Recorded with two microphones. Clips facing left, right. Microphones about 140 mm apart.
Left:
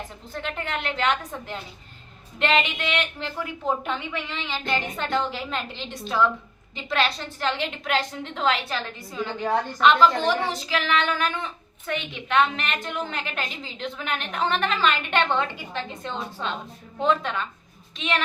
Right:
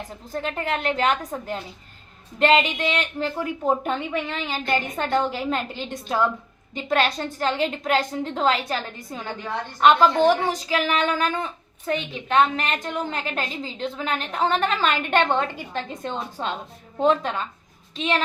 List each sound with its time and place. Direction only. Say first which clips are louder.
0.3 s a woman's voice: right 4 dB; 40° right (ahead or behind)